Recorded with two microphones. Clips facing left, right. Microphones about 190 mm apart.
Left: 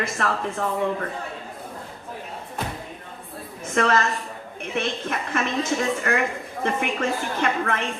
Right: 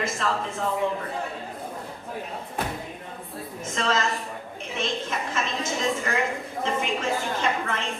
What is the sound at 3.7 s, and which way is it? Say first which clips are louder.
A woman's voice: left 5 dB; 60° left (ahead or behind).